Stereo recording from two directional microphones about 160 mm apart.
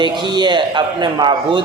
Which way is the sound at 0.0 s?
30° right (ahead or behind).